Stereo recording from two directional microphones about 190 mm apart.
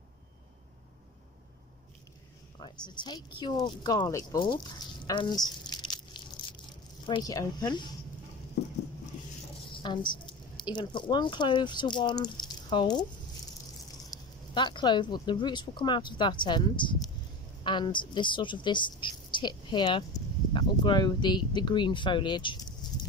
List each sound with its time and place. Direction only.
2.8 s speech: 25° left (ahead or behind)
6.2 s a sound: 25° left (ahead or behind)
7.1 s speech: 20° left (ahead or behind)
8.6 s patter: 60° left (ahead or behind)
9.7 s speech: 25° left (ahead or behind)
14.1 s a woman's voice: 25° left (ahead or behind)
22.8 s a sound: 20° left (ahead or behind)